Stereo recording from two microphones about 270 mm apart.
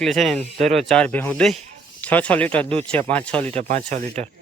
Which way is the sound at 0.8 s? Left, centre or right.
Centre.